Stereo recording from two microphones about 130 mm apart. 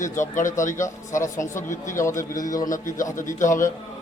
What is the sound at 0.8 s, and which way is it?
Speech, 25° left (ahead or behind).